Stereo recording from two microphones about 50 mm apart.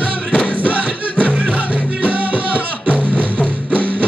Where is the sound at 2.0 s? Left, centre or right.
Right.